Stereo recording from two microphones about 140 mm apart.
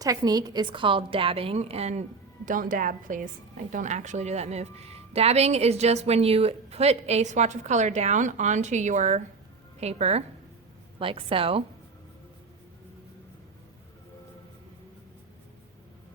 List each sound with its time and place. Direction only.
0.0 s a woman's voice: 25° right (ahead or behind); by 2.0 s 50° right (ahead or behind)
2.5 s a woman's voice: 70° right (ahead or behind); by 11.6 s 40° right (ahead or behind)